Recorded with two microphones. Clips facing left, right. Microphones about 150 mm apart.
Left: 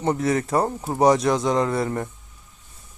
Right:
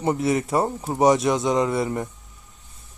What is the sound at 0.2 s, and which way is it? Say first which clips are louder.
Speech: even; 25° right (ahead or behind).